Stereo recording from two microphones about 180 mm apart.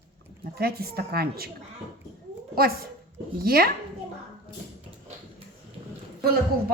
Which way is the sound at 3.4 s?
55° right (ahead or behind).